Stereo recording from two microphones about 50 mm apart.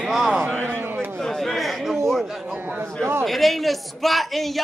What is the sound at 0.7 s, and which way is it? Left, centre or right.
Speech, right.